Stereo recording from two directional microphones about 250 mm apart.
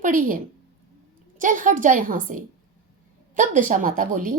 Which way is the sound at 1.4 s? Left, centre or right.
Right.